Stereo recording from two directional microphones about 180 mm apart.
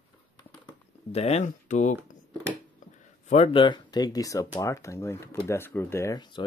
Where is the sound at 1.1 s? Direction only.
35° left (ahead or behind).